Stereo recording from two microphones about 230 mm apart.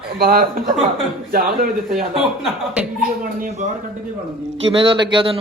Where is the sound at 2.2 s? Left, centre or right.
Centre.